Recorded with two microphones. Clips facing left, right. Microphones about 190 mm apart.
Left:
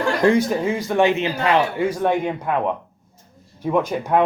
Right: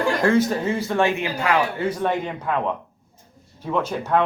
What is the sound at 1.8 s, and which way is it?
A man's voice, 10° left (ahead or behind).